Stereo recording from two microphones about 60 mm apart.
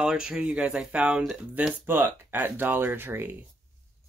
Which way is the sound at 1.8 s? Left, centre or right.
Right.